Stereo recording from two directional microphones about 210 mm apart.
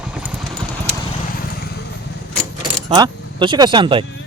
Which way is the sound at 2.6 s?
20° right (ahead or behind).